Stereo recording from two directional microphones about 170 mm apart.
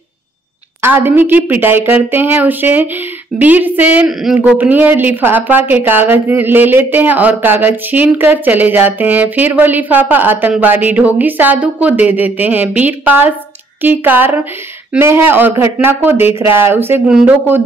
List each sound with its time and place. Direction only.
0.8 s speech: 10° right (ahead or behind)